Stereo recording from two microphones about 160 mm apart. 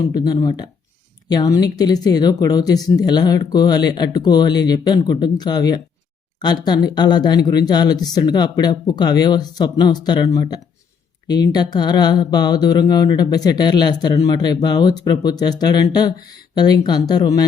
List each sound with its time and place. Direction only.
0.0 s speech: 25° left (ahead or behind)